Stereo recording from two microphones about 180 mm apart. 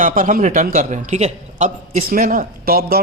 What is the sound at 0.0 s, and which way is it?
Speech, 50° right (ahead or behind).